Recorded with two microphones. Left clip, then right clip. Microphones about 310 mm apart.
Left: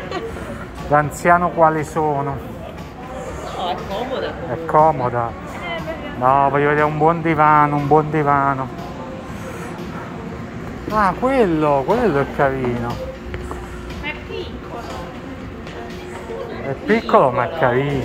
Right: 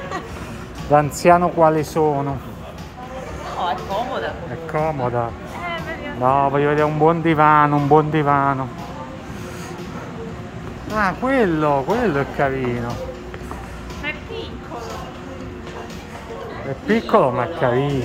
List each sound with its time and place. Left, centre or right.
0.8 s speech: right
4.7 s speech: centre
10.9 s speech: centre
16.8 s speech: centre